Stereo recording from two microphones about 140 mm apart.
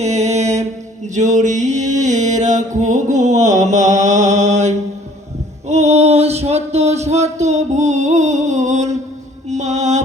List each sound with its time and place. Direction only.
0.0 s music: 55° right (ahead or behind)
9.5 s mantra: 55° right (ahead or behind)